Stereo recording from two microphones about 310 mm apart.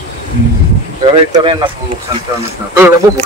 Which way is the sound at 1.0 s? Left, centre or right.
Centre.